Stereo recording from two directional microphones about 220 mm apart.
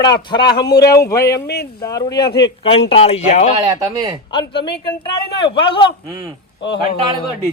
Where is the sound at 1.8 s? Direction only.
15° left (ahead or behind).